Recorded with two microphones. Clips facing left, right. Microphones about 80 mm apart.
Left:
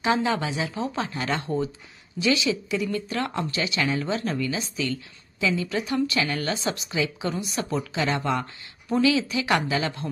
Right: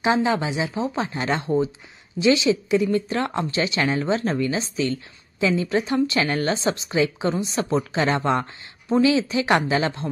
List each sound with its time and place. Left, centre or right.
0.0 s a woman's voice: right